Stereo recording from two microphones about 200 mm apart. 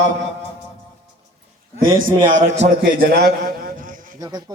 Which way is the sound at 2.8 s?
50° right (ahead or behind).